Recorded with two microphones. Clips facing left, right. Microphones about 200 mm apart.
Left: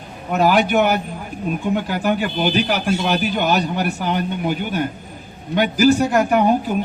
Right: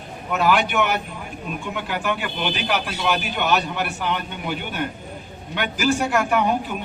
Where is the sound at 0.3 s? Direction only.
40° left (ahead or behind).